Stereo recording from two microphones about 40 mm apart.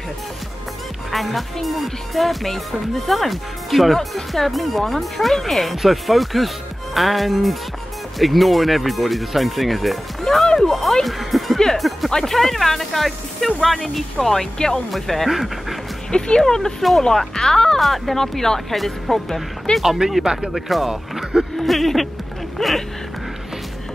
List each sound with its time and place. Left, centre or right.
1.1 s speech: centre
10.4 s music: centre
10.7 s music: centre
11.6 s speech: centre
16.1 s speech: centre
17.7 s speech: centre
19.8 s speech: centre
21.5 s a sound: centre
22.6 s speech: centre